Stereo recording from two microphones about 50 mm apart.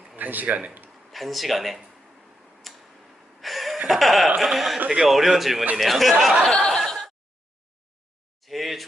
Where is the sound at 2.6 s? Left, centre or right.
Centre.